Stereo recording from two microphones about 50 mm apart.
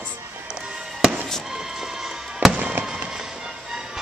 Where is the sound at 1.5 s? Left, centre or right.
Centre.